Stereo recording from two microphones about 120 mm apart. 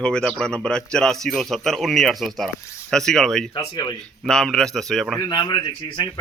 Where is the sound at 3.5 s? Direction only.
35° left (ahead or behind).